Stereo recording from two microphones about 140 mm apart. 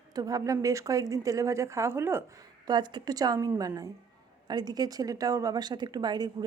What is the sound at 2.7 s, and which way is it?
Speech, 30° right (ahead or behind).